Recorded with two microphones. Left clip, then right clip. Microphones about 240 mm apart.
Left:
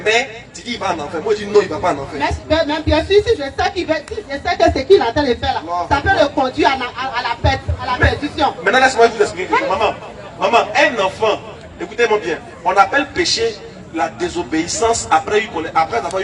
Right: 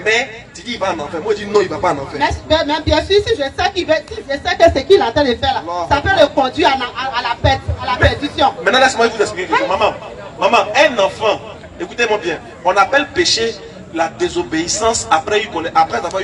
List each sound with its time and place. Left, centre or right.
0.0 s a woman's voice: centre
1.3 s a man's voice: centre
2.1 s speech: right